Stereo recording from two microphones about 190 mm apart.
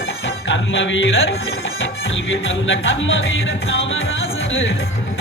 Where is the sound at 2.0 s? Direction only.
85° left.